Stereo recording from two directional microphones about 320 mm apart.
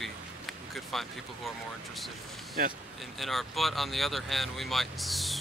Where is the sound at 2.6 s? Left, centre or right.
Right.